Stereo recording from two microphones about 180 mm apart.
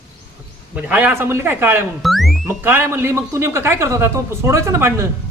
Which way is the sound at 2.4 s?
10° right (ahead or behind).